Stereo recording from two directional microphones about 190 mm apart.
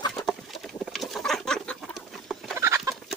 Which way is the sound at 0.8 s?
Centre (ahead or behind).